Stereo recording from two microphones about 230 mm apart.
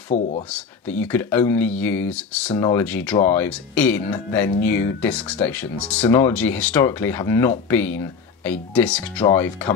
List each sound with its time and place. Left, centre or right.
0.1 s speech: left
0.5 s speech: centre